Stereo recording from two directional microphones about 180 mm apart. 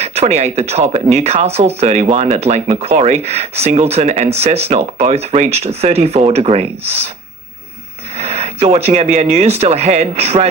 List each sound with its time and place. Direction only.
0.0 s speech: 35° right (ahead or behind)
8.2 s speech: 35° right (ahead or behind)